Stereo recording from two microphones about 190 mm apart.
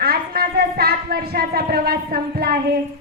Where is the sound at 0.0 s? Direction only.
55° right (ahead or behind).